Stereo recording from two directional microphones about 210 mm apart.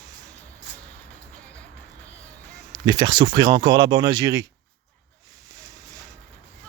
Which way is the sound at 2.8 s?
20° right (ahead or behind).